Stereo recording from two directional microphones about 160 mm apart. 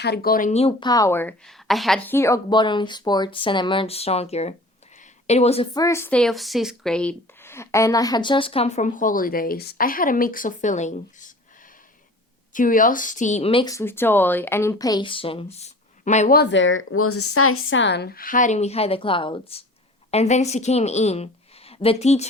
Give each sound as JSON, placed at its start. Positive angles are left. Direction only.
{"t": 0.0, "sound": "speech", "side_deg": 80}
{"t": 0.5, "sound": "a woman's voice", "side_deg": 35}
{"t": 5.7, "sound": "speech", "side_deg": 20}
{"t": 12.5, "sound": "speech", "side_deg": 55}
{"t": 13.7, "sound": "a woman's voice", "side_deg": 15}
{"t": 16.3, "sound": "speech", "side_deg": 85}
{"t": 17.8, "sound": "a woman's voice", "side_deg": 90}